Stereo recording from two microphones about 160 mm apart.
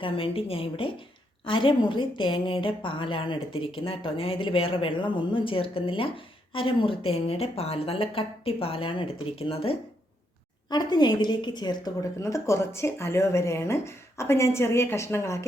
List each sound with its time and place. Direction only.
0.0 s a woman's voice: 35° left (ahead or behind); by 15.4 s 15° left (ahead or behind)